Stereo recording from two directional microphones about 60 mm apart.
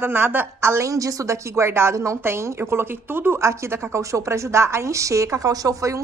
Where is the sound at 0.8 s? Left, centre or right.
Right.